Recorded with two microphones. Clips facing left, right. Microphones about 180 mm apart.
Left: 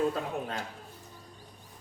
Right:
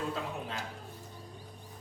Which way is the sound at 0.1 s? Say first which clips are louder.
Left 3 dB; 50° left (ahead or behind).